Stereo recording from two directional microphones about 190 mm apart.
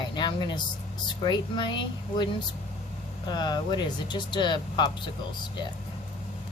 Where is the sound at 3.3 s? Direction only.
20° left (ahead or behind).